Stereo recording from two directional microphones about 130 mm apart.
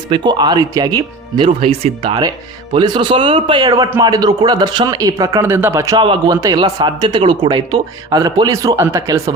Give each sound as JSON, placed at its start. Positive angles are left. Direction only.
{"t": 0.1, "sound": "speech", "side_deg": -35}
{"t": 1.6, "sound": "a man's voice", "side_deg": -45}
{"t": 6.0, "sound": "speech", "side_deg": -35}